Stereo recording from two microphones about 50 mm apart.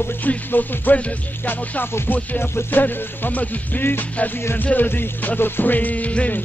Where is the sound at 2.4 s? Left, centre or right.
Left.